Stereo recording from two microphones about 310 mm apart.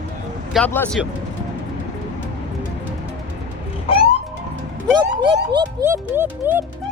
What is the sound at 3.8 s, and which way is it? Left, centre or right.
Music, centre.